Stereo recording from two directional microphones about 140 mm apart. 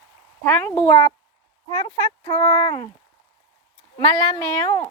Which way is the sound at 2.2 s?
30° left (ahead or behind).